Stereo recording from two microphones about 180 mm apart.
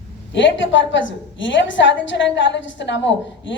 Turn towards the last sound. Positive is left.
turn(degrees=85)